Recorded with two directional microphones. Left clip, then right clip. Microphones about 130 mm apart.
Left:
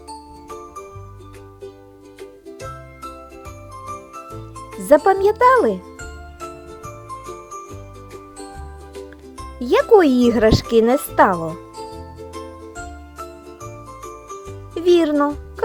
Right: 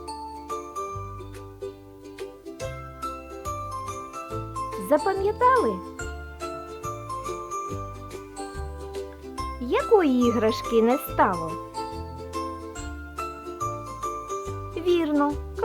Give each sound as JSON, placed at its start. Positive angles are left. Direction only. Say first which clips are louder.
{"t": 0.1, "sound": "music", "louder": "right 1 dB", "side_deg": 0}
{"t": 2.6, "sound": "jingle", "louder": "even", "side_deg": 0}
{"t": 4.9, "sound": "speech", "louder": "left 10 dB", "side_deg": 45}
{"t": 6.8, "sound": "jingle bell", "louder": "right 1 dB", "side_deg": 0}
{"t": 9.6, "sound": "a child's voice", "louder": "left 8 dB", "side_deg": 40}
{"t": 11.4, "sound": "music", "louder": "left 2 dB", "side_deg": 0}
{"t": 13.6, "sound": "jingle", "louder": "right 6 dB", "side_deg": 0}
{"t": 14.8, "sound": "music", "louder": "left 9 dB", "side_deg": 40}
{"t": 15.1, "sound": "a child's voice", "louder": "left 5 dB", "side_deg": 20}